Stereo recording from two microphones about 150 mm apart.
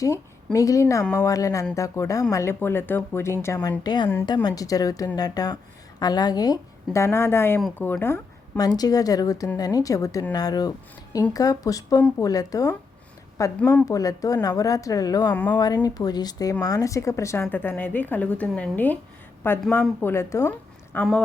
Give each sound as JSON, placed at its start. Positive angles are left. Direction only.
{"t": 0.0, "sound": "a woman's voice", "side_deg": 20}
{"t": 20.9, "sound": "speech", "side_deg": 5}